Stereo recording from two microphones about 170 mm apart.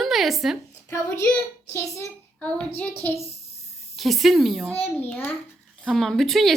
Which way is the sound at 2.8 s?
10° left (ahead or behind).